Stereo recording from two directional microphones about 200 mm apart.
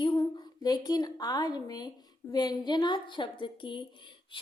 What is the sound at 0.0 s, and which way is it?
Female singing, 20° left (ahead or behind).